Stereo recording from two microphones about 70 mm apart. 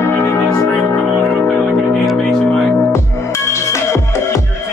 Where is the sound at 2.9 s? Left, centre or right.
Left.